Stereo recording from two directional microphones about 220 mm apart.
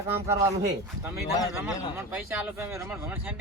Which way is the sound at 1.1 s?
Centre (ahead or behind).